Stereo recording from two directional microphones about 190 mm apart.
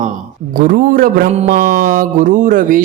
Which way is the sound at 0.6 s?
45° right (ahead or behind).